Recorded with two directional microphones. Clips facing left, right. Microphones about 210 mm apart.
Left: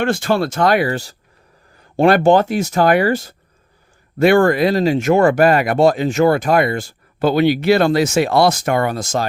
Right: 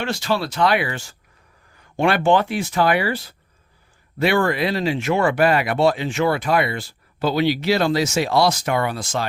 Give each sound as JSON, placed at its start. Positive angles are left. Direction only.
{"t": 0.0, "sound": "speech", "side_deg": 50}